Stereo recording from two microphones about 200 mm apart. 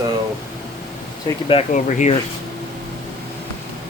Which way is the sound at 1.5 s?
35° left (ahead or behind).